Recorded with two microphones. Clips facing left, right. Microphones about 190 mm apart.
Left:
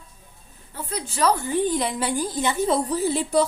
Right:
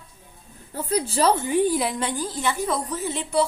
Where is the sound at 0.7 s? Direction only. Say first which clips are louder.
Right 7 dB; 35° right (ahead or behind).